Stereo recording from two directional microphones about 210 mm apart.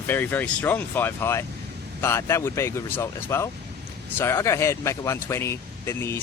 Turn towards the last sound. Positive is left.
turn(degrees=15)  # may be behind; listen again after turning